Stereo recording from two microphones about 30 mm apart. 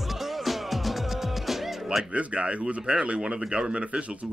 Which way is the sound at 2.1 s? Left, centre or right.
Right.